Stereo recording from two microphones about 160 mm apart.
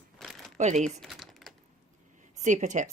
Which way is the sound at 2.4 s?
50° right (ahead or behind).